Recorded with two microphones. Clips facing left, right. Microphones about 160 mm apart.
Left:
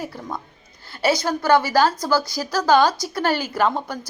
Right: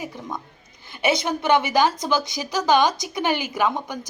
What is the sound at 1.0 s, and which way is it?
A woman's voice, 20° right (ahead or behind).